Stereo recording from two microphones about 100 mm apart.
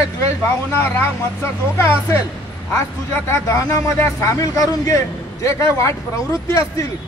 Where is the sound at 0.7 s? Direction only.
20° left (ahead or behind).